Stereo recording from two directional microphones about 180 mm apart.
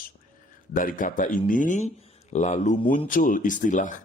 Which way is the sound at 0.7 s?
50° left (ahead or behind).